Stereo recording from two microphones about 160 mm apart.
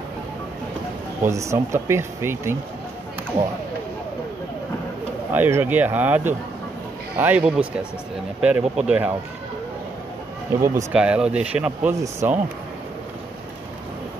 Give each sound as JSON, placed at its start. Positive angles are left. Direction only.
{"t": 1.2, "sound": "speech", "side_deg": -20}
{"t": 5.3, "sound": "speech", "side_deg": -10}
{"t": 10.5, "sound": "speech", "side_deg": -15}
{"t": 10.9, "sound": "speech", "side_deg": -5}
{"t": 11.9, "sound": "speech", "side_deg": -15}